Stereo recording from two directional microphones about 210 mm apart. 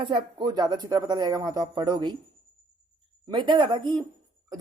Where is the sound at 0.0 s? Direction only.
20° right (ahead or behind).